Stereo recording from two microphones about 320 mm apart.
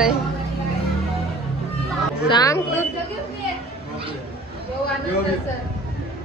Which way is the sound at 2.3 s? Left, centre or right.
Centre.